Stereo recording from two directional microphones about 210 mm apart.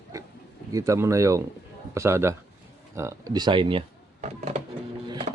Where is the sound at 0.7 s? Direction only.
15° right (ahead or behind); by 4.6 s 35° right (ahead or behind).